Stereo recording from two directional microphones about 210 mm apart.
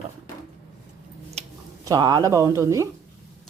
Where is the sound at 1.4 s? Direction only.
30° right (ahead or behind).